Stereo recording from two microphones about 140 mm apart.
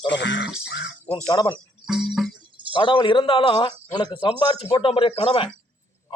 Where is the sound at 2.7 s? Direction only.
35° left (ahead or behind).